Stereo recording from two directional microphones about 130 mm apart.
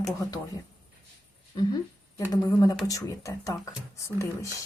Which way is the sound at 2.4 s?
25° left (ahead or behind).